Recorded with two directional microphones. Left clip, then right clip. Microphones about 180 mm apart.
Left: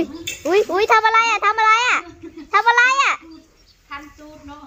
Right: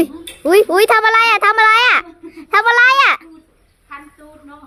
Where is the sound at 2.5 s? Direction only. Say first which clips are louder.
Right 4 dB; 35° right (ahead or behind).